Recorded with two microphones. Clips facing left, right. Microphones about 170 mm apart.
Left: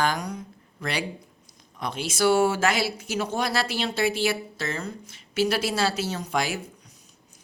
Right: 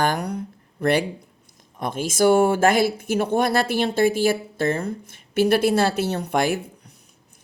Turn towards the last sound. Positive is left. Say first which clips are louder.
# right 6 dB
turn(degrees=-55)  # may be behind; listen again after turning